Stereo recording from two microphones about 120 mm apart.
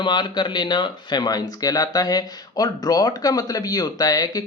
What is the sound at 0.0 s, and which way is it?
A man's voice, 40° left (ahead or behind).